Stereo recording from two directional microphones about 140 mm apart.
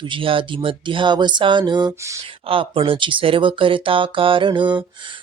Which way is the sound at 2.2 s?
40° right (ahead or behind).